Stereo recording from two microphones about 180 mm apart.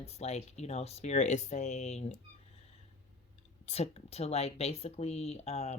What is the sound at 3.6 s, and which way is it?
Speech, 35° left (ahead or behind).